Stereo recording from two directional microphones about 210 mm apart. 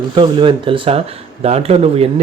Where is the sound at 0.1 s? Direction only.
25° right (ahead or behind).